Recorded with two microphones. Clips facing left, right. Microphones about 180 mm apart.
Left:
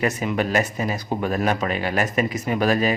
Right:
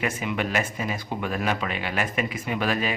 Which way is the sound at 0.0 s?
40° left (ahead or behind).